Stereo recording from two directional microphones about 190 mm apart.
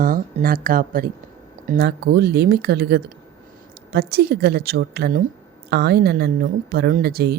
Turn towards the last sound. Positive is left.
turn(degrees=-55)  # may be behind; listen again after turning